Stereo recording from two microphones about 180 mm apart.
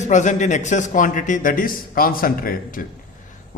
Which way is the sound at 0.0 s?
40° left (ahead or behind).